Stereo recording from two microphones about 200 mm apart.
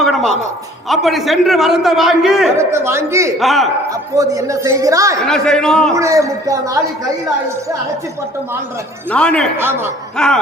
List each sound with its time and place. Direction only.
0.0 s a sound: centre (ahead or behind)
0.9 s a man's voice: centre (ahead or behind)
2.6 s a man's voice: 15° right (ahead or behind)
3.3 s a man's voice: centre (ahead or behind)
4.1 s a man's voice: 15° right (ahead or behind)
5.2 s a man's voice: 5° left (ahead or behind)
5.9 s a man's voice: 15° right (ahead or behind)
9.0 s a man's voice: 5° left (ahead or behind)
9.6 s a man's voice: 10° right (ahead or behind)
10.2 s a man's voice: 5° left (ahead or behind)